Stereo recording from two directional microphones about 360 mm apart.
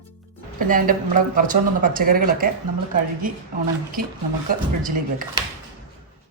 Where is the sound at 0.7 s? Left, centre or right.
Right.